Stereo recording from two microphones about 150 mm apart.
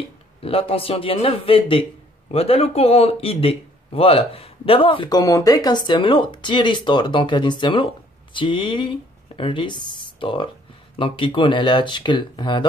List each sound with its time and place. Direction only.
0.4 s a man's voice: 40° left (ahead or behind)